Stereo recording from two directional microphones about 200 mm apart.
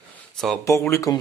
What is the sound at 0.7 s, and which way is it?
Speech, 15° left (ahead or behind).